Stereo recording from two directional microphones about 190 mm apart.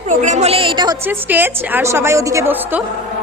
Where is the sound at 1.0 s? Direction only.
10° right (ahead or behind).